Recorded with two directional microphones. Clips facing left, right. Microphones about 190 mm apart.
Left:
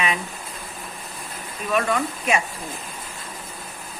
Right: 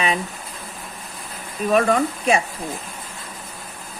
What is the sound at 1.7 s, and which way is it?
Speech, 35° right (ahead or behind).